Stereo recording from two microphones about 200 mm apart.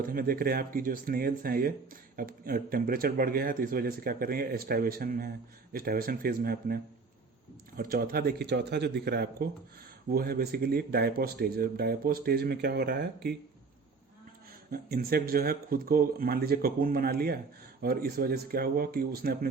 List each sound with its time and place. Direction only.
0.0 s speech: 45° right (ahead or behind)
7.8 s speech: 45° right (ahead or behind)
14.7 s speech: 50° right (ahead or behind)